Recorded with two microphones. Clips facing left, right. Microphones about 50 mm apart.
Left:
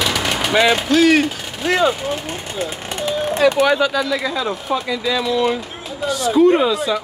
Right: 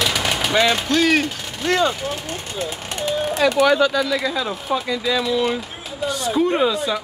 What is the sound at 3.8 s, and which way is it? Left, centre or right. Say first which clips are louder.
Speech: even; centre.